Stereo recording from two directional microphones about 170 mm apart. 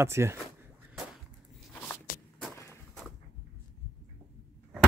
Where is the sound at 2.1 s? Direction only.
50° left (ahead or behind).